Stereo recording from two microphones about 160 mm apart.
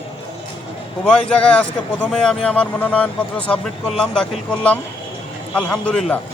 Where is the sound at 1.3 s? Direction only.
5° left (ahead or behind).